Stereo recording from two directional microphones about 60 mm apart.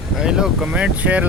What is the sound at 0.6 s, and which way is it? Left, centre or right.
Speech, right.